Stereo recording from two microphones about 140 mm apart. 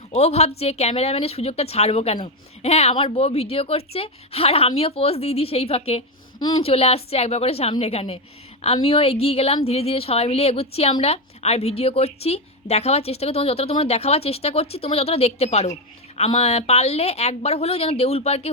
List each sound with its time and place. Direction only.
0.1 s a woman's voice: 50° left (ahead or behind)